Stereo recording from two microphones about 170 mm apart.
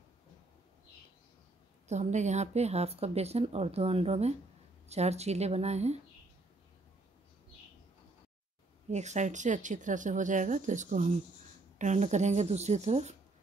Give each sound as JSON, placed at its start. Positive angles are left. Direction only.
{"t": 1.9, "sound": "speech", "side_deg": -45}
{"t": 8.9, "sound": "speech", "side_deg": -45}